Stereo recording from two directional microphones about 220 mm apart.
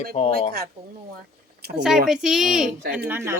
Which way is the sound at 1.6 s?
45° right (ahead or behind).